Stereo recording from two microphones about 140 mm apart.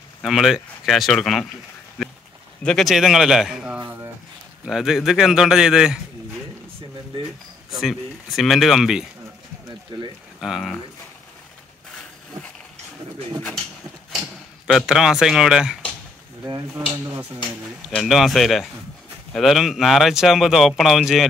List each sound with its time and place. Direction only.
0.2 s speech: centre (ahead or behind)
2.6 s speech: centre (ahead or behind)
7.7 s speech: centre (ahead or behind)
9.9 s speech: 30° right (ahead or behind)
10.4 s speech: centre (ahead or behind)
14.7 s speech: centre (ahead or behind)
17.8 s speech: centre (ahead or behind)